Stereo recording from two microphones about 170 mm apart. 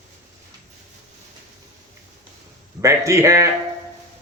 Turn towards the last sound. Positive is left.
turn(degrees=-15)  # may be behind; listen again after turning